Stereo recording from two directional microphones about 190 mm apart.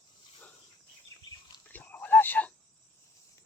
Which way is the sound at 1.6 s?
10° left (ahead or behind).